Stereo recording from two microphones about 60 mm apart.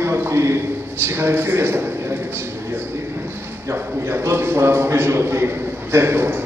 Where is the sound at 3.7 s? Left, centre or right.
Right.